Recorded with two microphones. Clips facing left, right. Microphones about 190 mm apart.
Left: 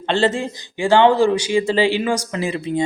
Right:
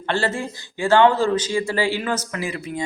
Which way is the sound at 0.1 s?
20° left (ahead or behind).